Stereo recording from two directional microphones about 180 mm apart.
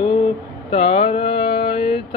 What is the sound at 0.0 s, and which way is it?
Mantra, 30° left (ahead or behind).